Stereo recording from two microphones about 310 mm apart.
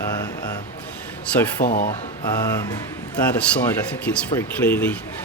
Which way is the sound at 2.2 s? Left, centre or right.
Centre.